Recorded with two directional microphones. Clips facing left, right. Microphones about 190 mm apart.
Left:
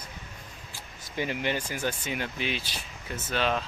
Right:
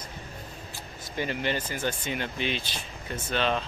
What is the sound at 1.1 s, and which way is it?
Speech, 10° left (ahead or behind).